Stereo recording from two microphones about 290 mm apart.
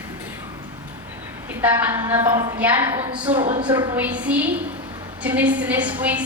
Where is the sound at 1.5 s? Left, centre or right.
Centre.